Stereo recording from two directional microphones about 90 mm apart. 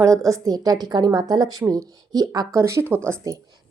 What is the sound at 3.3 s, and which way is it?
Speech, 40° right (ahead or behind).